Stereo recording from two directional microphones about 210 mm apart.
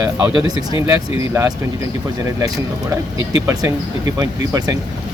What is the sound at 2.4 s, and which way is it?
Speech, 15° right (ahead or behind).